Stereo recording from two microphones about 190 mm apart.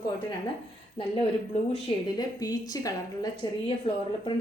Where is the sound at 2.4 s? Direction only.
20° left (ahead or behind).